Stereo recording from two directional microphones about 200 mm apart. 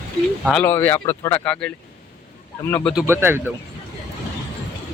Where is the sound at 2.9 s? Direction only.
10° right (ahead or behind).